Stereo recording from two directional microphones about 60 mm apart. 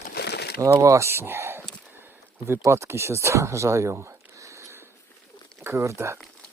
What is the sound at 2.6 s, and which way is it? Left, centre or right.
Speech, right.